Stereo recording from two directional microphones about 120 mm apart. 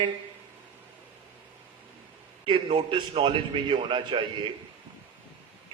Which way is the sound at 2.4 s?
45° right (ahead or behind).